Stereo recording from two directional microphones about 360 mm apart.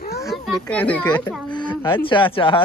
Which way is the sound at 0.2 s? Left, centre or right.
Centre.